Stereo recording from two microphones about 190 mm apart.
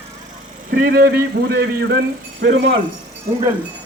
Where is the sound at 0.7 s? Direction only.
50° right (ahead or behind).